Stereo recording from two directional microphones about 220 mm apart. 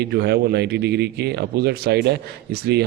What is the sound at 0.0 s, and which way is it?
Speech, 45° right (ahead or behind).